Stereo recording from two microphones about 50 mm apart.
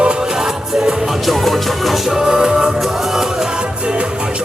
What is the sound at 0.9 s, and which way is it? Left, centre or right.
Music, centre.